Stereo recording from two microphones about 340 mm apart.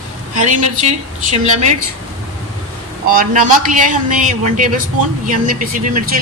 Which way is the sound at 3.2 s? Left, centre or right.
Right.